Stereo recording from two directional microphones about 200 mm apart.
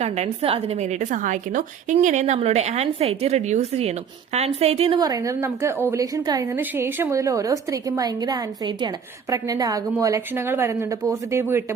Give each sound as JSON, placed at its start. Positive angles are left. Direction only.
{"t": 0.0, "sound": "a woman's voice", "side_deg": -35}
{"t": 4.9, "sound": "a woman's voice", "side_deg": -20}